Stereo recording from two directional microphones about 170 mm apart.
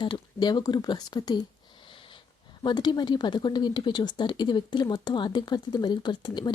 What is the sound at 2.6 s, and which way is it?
Speech, 25° left (ahead or behind).